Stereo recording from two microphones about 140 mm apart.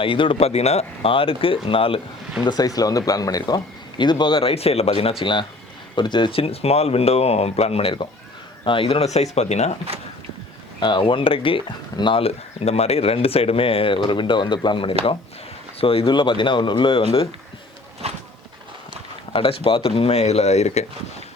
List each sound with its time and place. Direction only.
0.0 s speech: 40° left (ahead or behind)
2.4 s speech: 30° left (ahead or behind); by 5.1 s 45° left (ahead or behind)
5.2 s speech: 35° left (ahead or behind); by 9.7 s 50° left (ahead or behind)
10.8 s speech: 35° left (ahead or behind)
18.0 s a sound: 50° right (ahead or behind)
19.3 s speech: 40° left (ahead or behind)